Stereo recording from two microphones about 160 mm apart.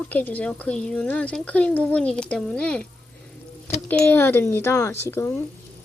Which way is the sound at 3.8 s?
10° left (ahead or behind).